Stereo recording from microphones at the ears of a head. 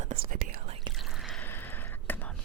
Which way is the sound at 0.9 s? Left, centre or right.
Centre.